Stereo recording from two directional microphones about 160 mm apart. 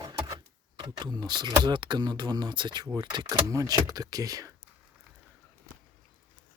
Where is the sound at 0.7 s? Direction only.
25° right (ahead or behind).